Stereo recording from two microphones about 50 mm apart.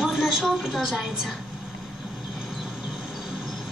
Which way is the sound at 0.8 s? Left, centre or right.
Centre.